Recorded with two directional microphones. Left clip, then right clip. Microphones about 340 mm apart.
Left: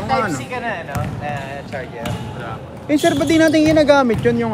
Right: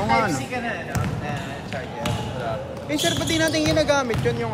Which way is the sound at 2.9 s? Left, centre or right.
Left.